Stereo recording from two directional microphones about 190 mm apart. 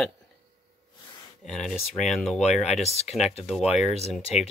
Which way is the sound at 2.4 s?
35° left (ahead or behind).